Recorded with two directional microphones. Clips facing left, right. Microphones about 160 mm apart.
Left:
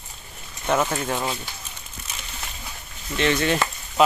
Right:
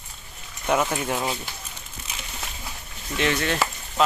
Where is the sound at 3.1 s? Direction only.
5° right (ahead or behind).